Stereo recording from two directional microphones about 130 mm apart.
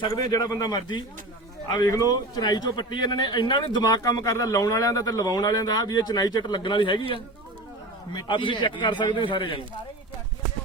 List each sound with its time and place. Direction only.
0.0 s a man's voice: 30° left (ahead or behind)
8.1 s a man's voice: 40° left (ahead or behind)